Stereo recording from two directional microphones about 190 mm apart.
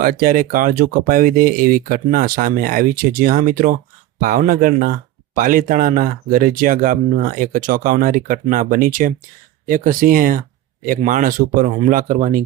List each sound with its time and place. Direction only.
0.0 s speech: 50° right (ahead or behind)